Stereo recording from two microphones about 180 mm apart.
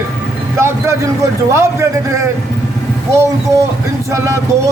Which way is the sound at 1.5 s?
15° right (ahead or behind).